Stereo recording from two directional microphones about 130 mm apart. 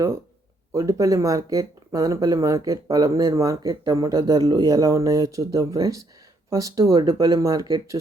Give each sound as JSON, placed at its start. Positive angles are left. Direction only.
{"t": 0.7, "sound": "speech", "side_deg": -25}